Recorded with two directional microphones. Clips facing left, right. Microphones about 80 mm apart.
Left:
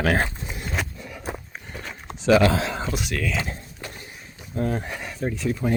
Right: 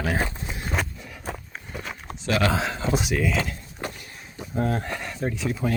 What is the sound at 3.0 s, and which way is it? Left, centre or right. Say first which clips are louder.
Speech: right 3 dB; centre.